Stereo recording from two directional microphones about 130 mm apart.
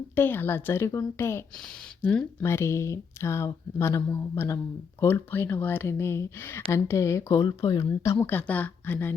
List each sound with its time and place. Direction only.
0.2 s speech: 15° left (ahead or behind)
2.0 s speech: 10° left (ahead or behind)
2.4 s speech: 20° left (ahead or behind)